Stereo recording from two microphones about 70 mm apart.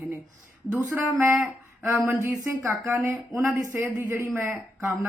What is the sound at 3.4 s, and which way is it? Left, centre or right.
Speech, right.